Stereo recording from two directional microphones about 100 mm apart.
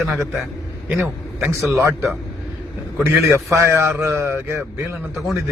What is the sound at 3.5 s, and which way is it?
A man's voice, 30° right (ahead or behind).